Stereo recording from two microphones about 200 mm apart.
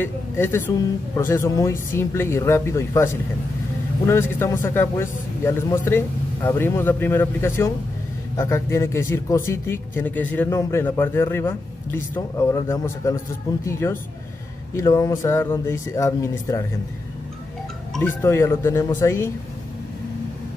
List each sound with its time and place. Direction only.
0.0 s a man's voice: 10° left (ahead or behind)
17.9 s a man's voice: 10° left (ahead or behind)